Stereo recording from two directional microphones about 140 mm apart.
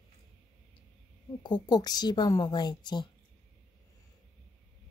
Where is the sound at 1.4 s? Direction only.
30° left (ahead or behind).